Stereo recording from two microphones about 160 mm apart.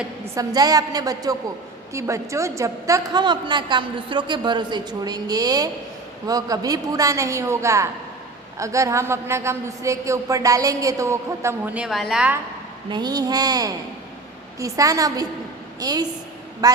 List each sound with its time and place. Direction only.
0.3 s a woman's voice: 25° right (ahead or behind); by 12.4 s 5° right (ahead or behind)
12.9 s a woman's voice: 25° right (ahead or behind)